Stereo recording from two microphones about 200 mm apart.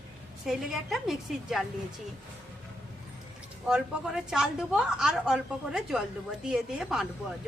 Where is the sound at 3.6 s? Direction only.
5° right (ahead or behind).